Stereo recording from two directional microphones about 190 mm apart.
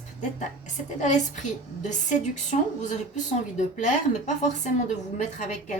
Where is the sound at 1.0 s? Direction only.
40° left (ahead or behind).